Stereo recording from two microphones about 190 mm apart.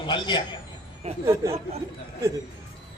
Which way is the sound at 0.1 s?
25° left (ahead or behind).